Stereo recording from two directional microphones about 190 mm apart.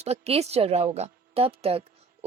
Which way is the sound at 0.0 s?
35° right (ahead or behind).